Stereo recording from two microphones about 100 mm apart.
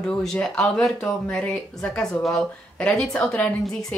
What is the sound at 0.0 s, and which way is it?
A woman's voice, 5° left (ahead or behind).